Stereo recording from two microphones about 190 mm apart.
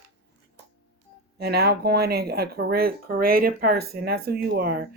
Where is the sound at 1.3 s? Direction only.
55° right (ahead or behind).